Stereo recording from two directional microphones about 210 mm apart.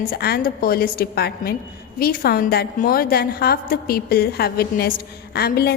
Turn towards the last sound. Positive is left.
turn(degrees=50)  # may be behind; listen again after turning